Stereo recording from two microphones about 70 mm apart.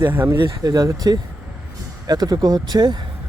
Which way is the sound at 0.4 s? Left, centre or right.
Right.